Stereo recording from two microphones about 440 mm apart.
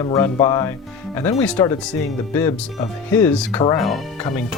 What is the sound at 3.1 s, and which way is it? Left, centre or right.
Speech, centre.